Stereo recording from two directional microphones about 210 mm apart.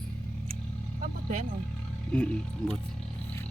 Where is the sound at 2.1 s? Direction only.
5° left (ahead or behind).